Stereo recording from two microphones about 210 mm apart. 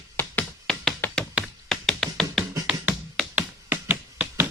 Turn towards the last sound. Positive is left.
turn(degrees=-10)  # may be behind; listen again after turning